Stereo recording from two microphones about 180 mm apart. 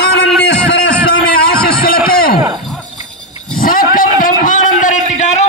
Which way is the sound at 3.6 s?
50° left (ahead or behind).